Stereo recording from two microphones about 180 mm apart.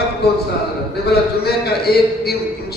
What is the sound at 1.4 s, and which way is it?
A man's voice, 60° left (ahead or behind).